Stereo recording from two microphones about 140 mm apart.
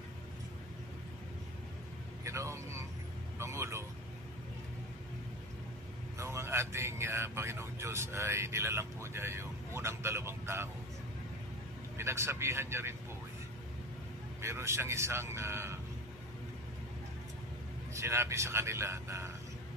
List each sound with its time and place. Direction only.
2.2 s a man's voice: 20° right (ahead or behind)
6.1 s a man's voice: 20° right (ahead or behind)
12.0 s a man's voice: 20° right (ahead or behind)
14.4 s a man's voice: 20° right (ahead or behind)
17.9 s a man's voice: 20° right (ahead or behind)